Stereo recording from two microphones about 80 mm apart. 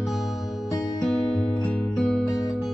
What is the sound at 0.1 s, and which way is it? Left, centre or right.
Music, centre.